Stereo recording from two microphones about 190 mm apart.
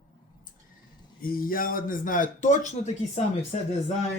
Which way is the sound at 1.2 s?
50° left (ahead or behind).